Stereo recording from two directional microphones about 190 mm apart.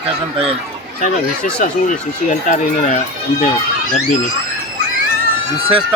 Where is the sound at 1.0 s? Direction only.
45° left (ahead or behind).